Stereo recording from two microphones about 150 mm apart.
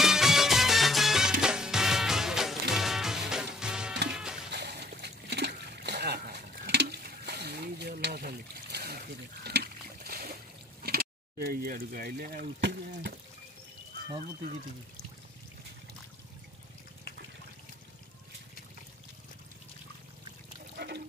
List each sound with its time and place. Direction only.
0.0 s music: 5° right (ahead or behind)
4.6 s splash: 90° right
10.8 s a sound: 90° right
20.7 s water: 90° right